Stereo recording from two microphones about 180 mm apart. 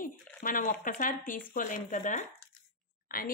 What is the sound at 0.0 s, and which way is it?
Speech, 50° left (ahead or behind).